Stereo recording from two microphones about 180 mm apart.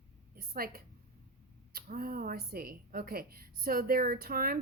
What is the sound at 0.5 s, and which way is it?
A woman's voice, 55° right (ahead or behind).